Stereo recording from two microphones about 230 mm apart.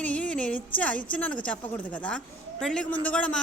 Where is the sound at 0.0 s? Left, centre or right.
Centre.